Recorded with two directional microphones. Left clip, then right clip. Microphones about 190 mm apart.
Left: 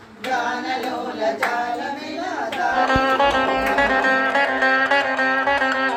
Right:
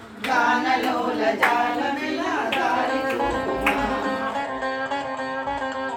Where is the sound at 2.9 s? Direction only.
25° left (ahead or behind).